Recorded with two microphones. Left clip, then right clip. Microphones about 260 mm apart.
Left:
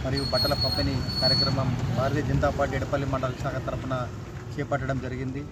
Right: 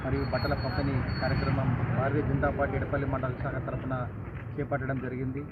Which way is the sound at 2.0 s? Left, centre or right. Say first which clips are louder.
Left 3 dB; left.